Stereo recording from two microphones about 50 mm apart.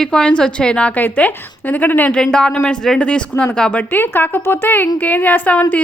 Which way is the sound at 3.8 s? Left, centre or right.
Left.